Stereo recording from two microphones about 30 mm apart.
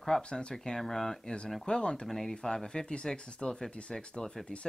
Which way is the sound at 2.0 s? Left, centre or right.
Centre.